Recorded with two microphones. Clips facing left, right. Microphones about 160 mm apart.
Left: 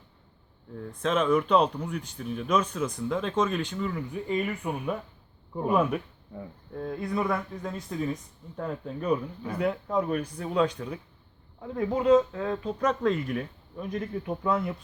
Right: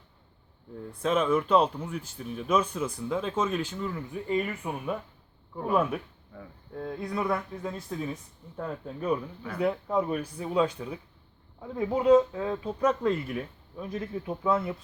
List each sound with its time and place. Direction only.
0.8 s speech: 5° right (ahead or behind)
5.5 s speech: 20° left (ahead or behind)
6.7 s speech: centre (ahead or behind)